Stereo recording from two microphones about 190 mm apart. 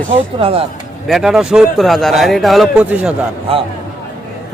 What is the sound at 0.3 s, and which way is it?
Speech, 30° right (ahead or behind).